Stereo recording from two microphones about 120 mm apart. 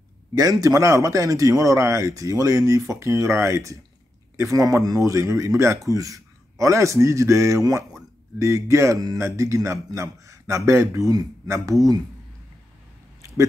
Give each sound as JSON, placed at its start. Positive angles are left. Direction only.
{"t": 0.3, "sound": "speech", "side_deg": -30}